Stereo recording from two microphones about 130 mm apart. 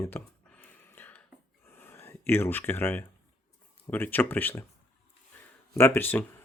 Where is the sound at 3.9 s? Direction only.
15° left (ahead or behind).